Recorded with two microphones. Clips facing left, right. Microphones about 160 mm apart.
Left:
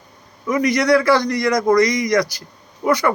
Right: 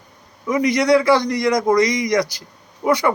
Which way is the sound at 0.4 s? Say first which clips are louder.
Even; 20° right (ahead or behind).